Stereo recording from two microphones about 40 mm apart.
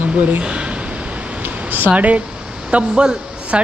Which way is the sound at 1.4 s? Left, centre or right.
Right.